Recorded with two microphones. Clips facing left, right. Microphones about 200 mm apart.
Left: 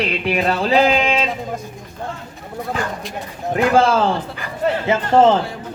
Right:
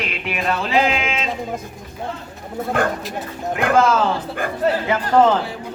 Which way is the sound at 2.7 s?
55° right (ahead or behind).